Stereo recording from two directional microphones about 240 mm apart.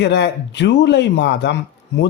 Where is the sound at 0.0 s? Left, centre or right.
Left.